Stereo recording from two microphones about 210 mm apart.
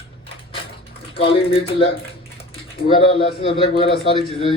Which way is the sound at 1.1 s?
25° left (ahead or behind).